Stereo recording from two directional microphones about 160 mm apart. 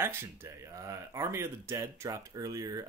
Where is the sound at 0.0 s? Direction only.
15° right (ahead or behind).